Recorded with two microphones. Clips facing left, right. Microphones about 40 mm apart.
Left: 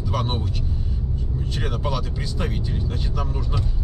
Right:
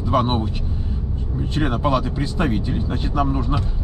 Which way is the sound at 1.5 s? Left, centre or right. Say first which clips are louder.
Right 8 dB; right.